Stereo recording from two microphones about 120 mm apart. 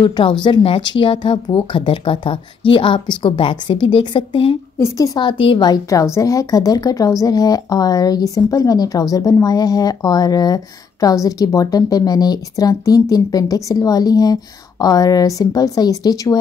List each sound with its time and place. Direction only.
0.0 s speech: 40° left (ahead or behind)
4.7 s a woman's voice: 25° left (ahead or behind)
5.2 s speech: 45° left (ahead or behind)
5.7 s a woman's voice: 30° left (ahead or behind)